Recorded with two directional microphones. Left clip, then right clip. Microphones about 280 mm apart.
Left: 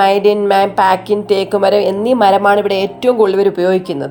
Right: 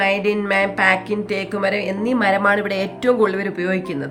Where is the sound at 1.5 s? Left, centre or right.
Centre.